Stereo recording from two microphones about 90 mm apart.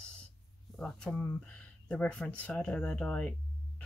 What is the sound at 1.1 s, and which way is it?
Speech, 25° left (ahead or behind).